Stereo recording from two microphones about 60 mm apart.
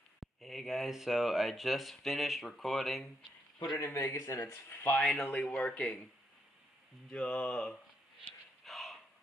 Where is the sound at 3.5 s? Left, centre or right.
Left.